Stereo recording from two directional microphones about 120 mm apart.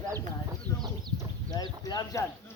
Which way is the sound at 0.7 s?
25° left (ahead or behind).